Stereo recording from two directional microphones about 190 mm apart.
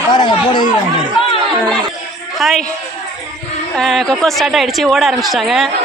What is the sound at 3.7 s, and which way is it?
Speech, centre (ahead or behind).